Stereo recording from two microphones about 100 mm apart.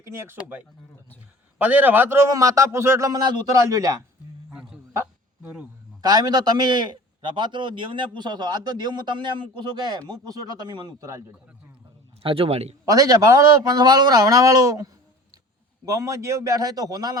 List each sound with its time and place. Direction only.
0.0 s a man's voice: 25° right (ahead or behind)
3.1 s a man's voice: 45° right (ahead or behind)
4.4 s a sound: 10° right (ahead or behind)
6.0 s a man's voice: 40° right (ahead or behind)
12.2 s speech: 70° right (ahead or behind); by 12.7 s 90° right
12.8 s a man's voice: 35° right (ahead or behind)
15.9 s a man's voice: 35° right (ahead or behind)